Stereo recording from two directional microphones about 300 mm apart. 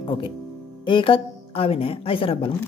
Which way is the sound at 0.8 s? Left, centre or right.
Centre.